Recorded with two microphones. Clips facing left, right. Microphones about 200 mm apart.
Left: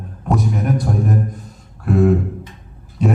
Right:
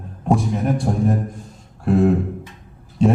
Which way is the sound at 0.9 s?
25° right (ahead or behind).